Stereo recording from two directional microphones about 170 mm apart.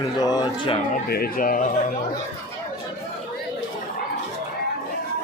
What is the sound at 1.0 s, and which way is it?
Speech, 65° left (ahead or behind).